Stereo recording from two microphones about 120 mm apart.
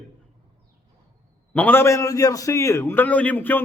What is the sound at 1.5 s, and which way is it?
Speech, 15° left (ahead or behind).